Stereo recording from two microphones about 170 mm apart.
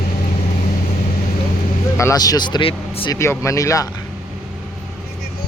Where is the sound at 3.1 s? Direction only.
15° left (ahead or behind).